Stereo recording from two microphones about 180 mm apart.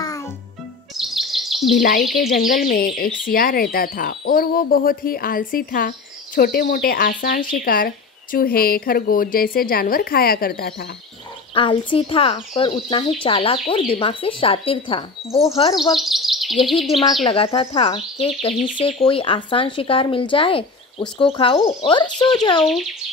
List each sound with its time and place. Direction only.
0.0 s music: 20° left (ahead or behind)
0.9 s bird vocalization: centre (ahead or behind)
1.8 s speech: 50° left (ahead or behind)
11.5 s speech: 30° left (ahead or behind)
16.0 s bird vocalization: centre (ahead or behind)
17.2 s speech: 30° left (ahead or behind)